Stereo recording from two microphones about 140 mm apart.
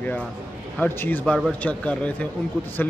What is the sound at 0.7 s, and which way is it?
A man's voice, 15° left (ahead or behind).